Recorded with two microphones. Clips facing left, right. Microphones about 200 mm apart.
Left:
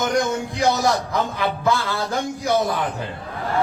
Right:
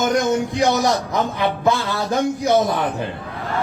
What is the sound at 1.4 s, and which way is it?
A man's voice, 20° right (ahead or behind).